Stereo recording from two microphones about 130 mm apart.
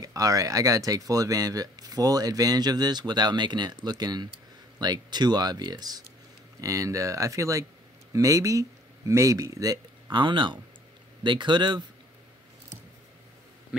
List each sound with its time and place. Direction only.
0.0 s speech: 25° right (ahead or behind)